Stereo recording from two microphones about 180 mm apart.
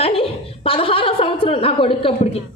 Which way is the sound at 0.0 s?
30° left (ahead or behind).